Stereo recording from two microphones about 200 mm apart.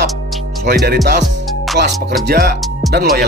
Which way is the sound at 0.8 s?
50° right (ahead or behind).